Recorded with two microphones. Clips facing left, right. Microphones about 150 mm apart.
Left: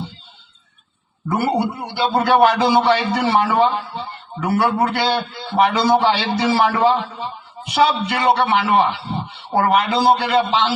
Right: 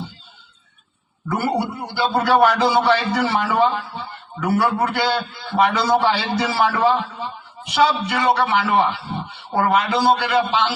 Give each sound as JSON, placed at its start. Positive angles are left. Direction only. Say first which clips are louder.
{"t": 1.3, "sound": "a man's voice", "louder": "left 2 dB", "side_deg": 25}